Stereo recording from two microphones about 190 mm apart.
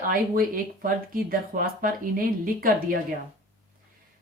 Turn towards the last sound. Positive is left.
turn(degrees=-45)  # may be behind; listen again after turning